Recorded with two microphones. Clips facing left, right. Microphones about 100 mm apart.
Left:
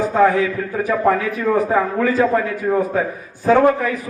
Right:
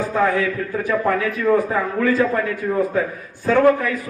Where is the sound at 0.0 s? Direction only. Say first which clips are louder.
Left 4 dB; 20° left (ahead or behind).